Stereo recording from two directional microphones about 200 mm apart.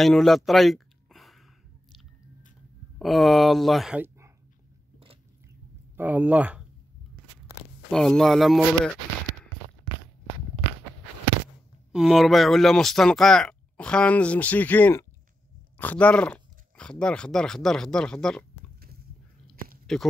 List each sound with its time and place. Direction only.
0.0 s a sound: centre (ahead or behind)
3.0 s speech: centre (ahead or behind)
5.9 s speech: 10° right (ahead or behind)
7.9 s speech: centre (ahead or behind)
11.9 s speech: centre (ahead or behind)
19.5 s chewing: 45° right (ahead or behind)